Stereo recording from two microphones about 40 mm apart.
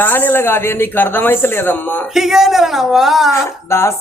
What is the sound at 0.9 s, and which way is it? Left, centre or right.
Speech, left.